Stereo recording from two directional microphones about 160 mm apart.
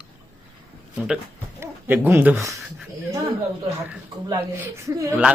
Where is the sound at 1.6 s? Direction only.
15° right (ahead or behind).